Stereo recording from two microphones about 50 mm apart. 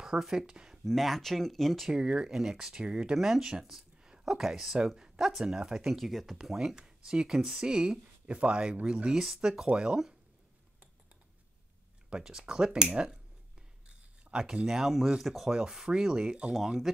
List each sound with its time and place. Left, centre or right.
0.0 s speech: centre
0.8 s speech: centre
1.9 s speech: centre
3.2 s speech: centre
5.9 s speech: centre
12.1 s speech: centre
13.8 s a sound: centre
14.8 s speech: centre
16.5 s speech: centre